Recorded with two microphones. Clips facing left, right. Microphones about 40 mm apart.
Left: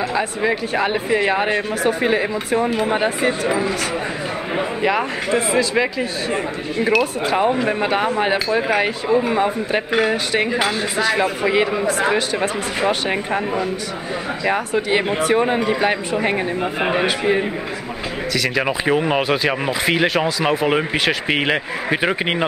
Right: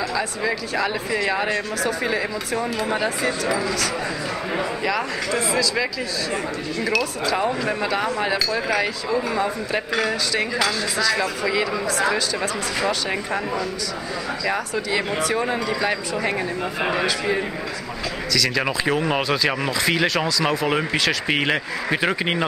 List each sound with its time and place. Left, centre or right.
0.1 s speech: left
18.9 s speech: centre